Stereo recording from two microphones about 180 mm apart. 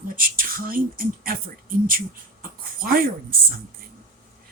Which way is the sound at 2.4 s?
50° right (ahead or behind).